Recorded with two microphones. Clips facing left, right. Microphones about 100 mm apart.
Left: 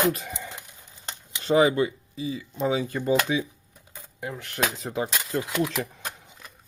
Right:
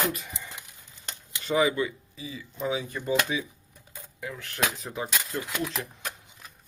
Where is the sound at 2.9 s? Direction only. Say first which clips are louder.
Left 4 dB; 65° left (ahead or behind).